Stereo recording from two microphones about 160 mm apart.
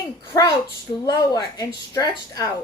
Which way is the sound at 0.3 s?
20° left (ahead or behind).